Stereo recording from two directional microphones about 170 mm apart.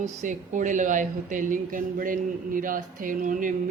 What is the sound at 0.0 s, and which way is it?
Speech, 45° right (ahead or behind).